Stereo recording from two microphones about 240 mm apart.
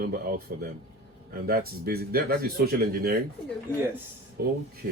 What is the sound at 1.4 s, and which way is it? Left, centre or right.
Speech, right.